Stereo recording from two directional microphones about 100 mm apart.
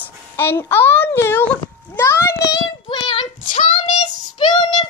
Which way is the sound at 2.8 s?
55° left (ahead or behind).